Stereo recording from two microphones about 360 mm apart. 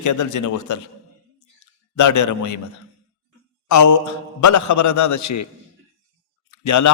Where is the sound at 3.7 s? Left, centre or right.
Left.